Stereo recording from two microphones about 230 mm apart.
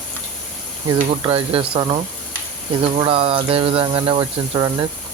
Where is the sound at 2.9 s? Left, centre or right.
Right.